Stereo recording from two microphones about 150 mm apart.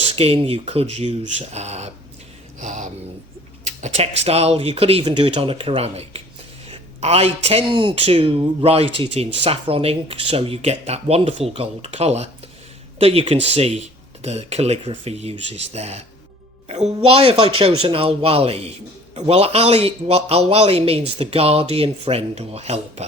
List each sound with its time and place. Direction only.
0.1 s speech: 40° right (ahead or behind)
2.6 s a sound: 55° right (ahead or behind)
3.8 s speech: 45° right (ahead or behind)